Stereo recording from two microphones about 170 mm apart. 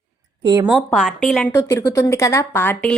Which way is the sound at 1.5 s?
15° left (ahead or behind).